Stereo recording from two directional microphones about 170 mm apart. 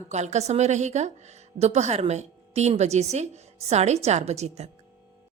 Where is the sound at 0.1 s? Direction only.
40° right (ahead or behind).